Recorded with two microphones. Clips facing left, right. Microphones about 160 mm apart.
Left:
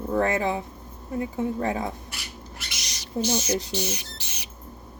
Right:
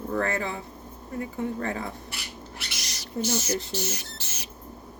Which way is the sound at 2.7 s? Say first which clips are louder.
Left 3 dB; 20° left (ahead or behind).